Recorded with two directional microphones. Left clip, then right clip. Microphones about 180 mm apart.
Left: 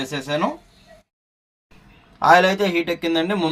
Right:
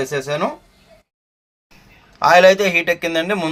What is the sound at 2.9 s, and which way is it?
Speech, 20° right (ahead or behind).